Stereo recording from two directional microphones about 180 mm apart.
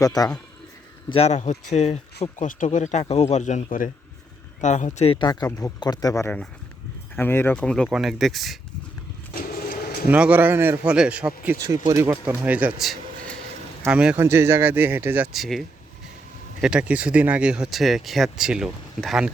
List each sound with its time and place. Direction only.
0.0 s speech: 20° left (ahead or behind)
1.1 s a man's voice: 35° left (ahead or behind)
4.9 s speech: 30° left (ahead or behind); by 8.5 s centre (ahead or behind)
9.3 s a sound: 50° left (ahead or behind)
10.1 s speech: 10° right (ahead or behind)